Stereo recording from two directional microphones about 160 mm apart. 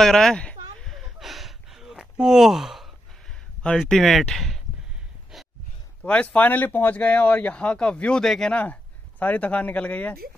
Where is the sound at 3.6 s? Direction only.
5° left (ahead or behind).